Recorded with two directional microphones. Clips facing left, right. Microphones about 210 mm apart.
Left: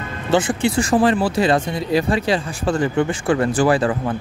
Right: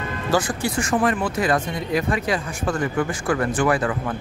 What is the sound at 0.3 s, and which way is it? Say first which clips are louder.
Speech: left 5 dB; 25° left (ahead or behind).